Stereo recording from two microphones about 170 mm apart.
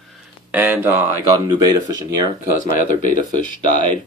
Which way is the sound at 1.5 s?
20° right (ahead or behind).